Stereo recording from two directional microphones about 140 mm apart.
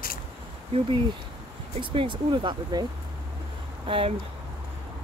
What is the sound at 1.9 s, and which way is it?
Speech, 35° right (ahead or behind).